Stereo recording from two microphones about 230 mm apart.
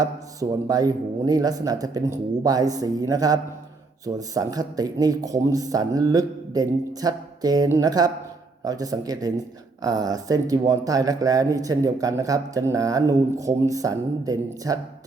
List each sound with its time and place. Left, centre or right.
0.0 s speech: centre